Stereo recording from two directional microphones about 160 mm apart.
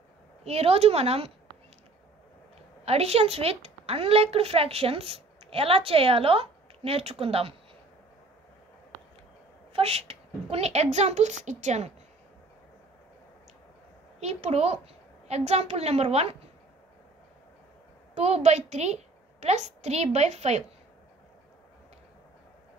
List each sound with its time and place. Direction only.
0.4 s a woman's voice: 40° right (ahead or behind)
2.8 s a woman's voice: 40° right (ahead or behind)
9.7 s a woman's voice: 40° right (ahead or behind)
14.2 s a woman's voice: 40° right (ahead or behind)
18.1 s a woman's voice: 45° right (ahead or behind)